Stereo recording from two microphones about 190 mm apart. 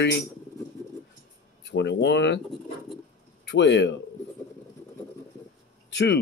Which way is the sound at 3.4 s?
65° left (ahead or behind).